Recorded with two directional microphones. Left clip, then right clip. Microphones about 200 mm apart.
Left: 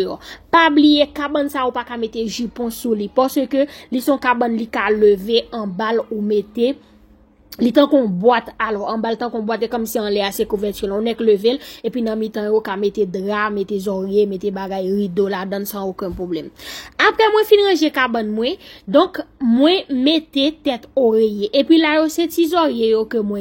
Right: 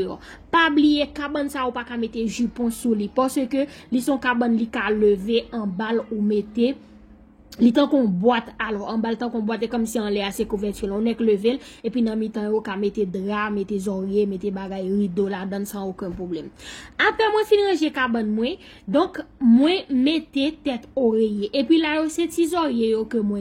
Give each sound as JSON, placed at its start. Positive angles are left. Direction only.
{"t": 0.0, "sound": "a woman's voice", "side_deg": 25}